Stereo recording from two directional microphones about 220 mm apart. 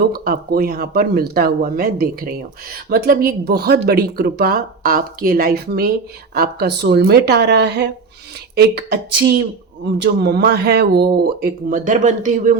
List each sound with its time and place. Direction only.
0.0 s speech: 45° right (ahead or behind)